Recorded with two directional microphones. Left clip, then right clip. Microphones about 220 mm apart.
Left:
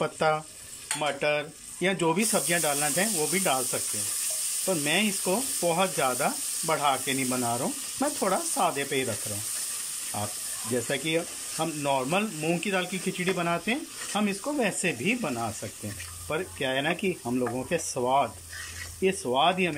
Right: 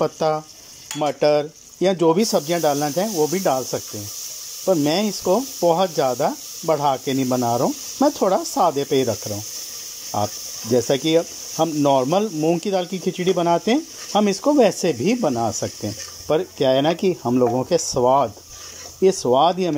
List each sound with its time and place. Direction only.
0.0 s stir: 15° right (ahead or behind)
0.9 s speech: 20° right (ahead or behind)
10.1 s speech: 25° right (ahead or behind)